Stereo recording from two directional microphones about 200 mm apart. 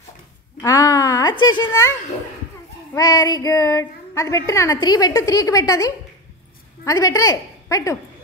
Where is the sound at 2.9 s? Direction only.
20° left (ahead or behind).